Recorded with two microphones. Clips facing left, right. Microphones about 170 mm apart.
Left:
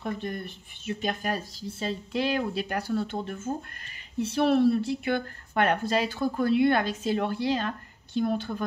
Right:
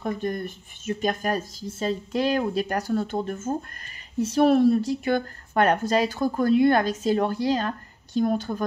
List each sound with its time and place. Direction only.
0.0 s a woman's voice: 45° right (ahead or behind)